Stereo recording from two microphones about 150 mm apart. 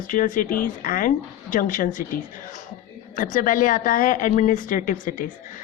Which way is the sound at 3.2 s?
60° left (ahead or behind).